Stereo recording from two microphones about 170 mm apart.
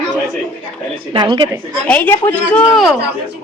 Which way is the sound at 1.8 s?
10° left (ahead or behind).